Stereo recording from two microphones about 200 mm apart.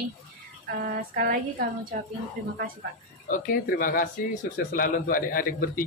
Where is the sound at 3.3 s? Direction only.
45° left (ahead or behind).